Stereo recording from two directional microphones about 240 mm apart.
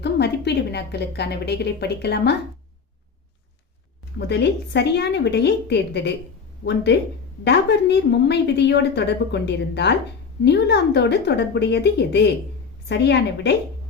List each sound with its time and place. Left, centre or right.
0.0 s a woman's voice: left
4.3 s a woman's voice: left